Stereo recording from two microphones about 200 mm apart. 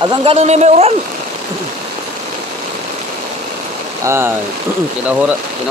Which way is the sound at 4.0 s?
15° right (ahead or behind).